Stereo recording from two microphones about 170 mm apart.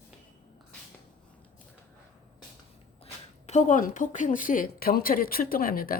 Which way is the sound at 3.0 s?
40° left (ahead or behind).